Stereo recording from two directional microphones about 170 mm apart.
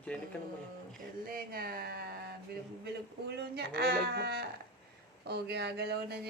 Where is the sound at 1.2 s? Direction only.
60° right (ahead or behind).